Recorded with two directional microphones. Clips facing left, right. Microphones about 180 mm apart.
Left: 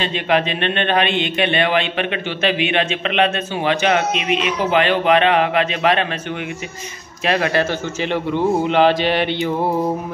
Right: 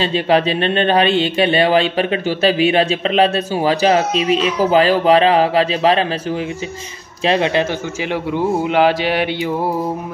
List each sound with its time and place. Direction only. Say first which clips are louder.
0.0 s a man's voice: right 4 dB; 35° right (ahead or behind)
7.2 s speech: right 2 dB; 25° right (ahead or behind)
8.0 s a man's voice: even; 10° right (ahead or behind)